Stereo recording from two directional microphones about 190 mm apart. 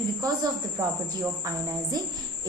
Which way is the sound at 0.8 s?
20° right (ahead or behind).